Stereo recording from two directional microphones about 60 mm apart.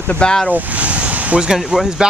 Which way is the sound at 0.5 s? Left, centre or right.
Right.